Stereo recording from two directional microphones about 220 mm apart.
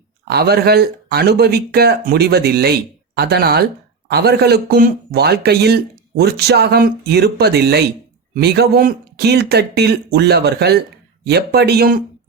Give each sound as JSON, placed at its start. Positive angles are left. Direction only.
{"t": 0.3, "sound": "speech", "side_deg": -45}